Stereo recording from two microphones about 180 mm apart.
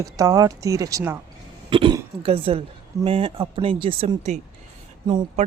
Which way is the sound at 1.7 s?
30° right (ahead or behind).